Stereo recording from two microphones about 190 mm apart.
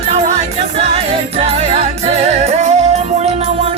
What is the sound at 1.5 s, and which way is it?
Music, 30° right (ahead or behind).